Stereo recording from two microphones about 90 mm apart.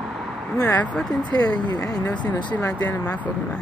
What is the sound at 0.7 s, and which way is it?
Speech, 15° left (ahead or behind).